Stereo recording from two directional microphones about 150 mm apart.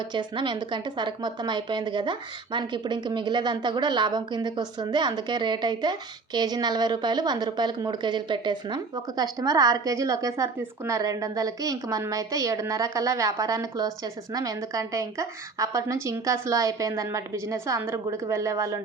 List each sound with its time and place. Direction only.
0.1 s a woman's voice: 30° right (ahead or behind)